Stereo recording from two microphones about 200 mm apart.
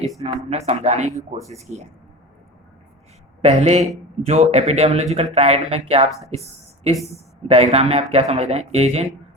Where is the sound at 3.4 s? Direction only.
30° right (ahead or behind).